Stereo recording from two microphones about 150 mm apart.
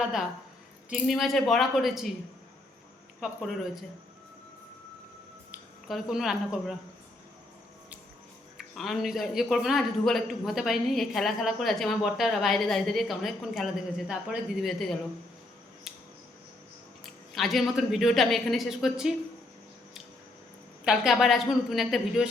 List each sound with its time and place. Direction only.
0.9 s a man's voice: centre (ahead or behind)
3.2 s a man's voice: centre (ahead or behind)
5.5 s speech: 5° right (ahead or behind)
8.5 s a man's voice: centre (ahead or behind)
15.9 s scissors: centre (ahead or behind)
17.3 s a man's voice: centre (ahead or behind)
20.8 s a man's voice: 5° right (ahead or behind)